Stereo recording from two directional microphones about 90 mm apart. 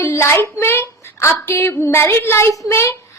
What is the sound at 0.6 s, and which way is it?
A woman's voice, 25° left (ahead or behind).